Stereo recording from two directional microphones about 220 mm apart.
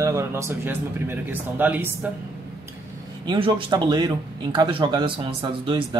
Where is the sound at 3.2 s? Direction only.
20° right (ahead or behind).